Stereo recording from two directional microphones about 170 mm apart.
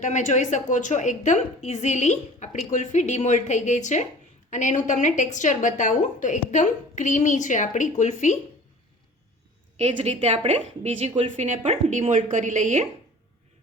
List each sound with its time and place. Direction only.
0.0 s a woman's voice: 45° left (ahead or behind)
9.7 s a woman's voice: 40° right (ahead or behind)